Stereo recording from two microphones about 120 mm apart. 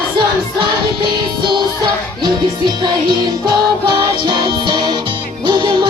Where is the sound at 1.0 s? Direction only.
40° right (ahead or behind).